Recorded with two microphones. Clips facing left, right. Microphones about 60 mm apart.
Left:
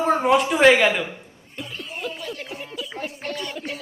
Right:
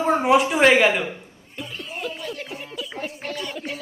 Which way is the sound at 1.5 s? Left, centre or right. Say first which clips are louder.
Right 1 dB; centre.